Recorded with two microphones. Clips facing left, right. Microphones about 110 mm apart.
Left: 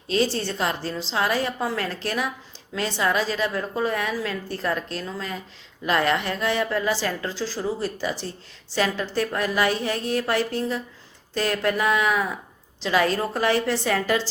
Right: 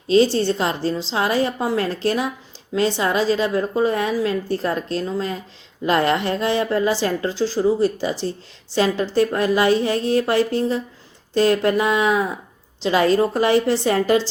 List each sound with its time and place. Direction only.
0.1 s a woman's voice: 25° right (ahead or behind)